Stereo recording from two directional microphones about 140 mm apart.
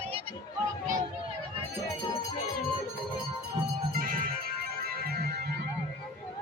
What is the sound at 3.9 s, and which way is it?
Music, 90° right.